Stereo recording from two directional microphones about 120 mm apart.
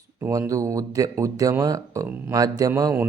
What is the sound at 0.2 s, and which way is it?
Speech, 25° right (ahead or behind).